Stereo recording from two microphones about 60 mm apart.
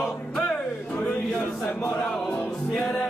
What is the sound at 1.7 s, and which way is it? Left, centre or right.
Speech, left.